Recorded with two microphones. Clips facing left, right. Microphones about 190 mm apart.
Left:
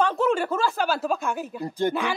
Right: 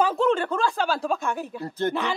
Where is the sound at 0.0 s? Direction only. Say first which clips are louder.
Right 1 dB; centre (ahead or behind).